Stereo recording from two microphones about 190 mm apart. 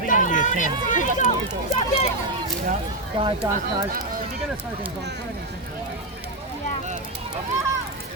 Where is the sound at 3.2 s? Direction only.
25° right (ahead or behind).